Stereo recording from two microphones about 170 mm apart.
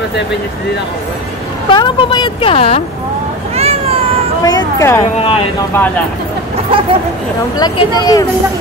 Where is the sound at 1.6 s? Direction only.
30° left (ahead or behind).